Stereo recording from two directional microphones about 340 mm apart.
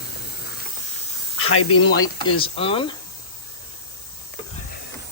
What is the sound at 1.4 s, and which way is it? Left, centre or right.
Speech, left.